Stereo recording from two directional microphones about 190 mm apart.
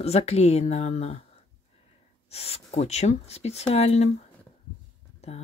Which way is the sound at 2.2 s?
35° left (ahead or behind).